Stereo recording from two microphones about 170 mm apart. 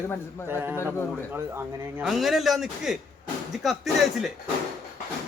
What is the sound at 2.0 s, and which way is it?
Speech, centre (ahead or behind).